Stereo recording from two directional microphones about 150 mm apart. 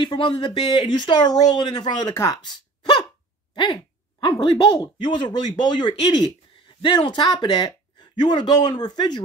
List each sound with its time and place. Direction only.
0.0 s speech: 30° left (ahead or behind)
2.1 s a sound: 25° left (ahead or behind)
4.2 s speech: 30° left (ahead or behind)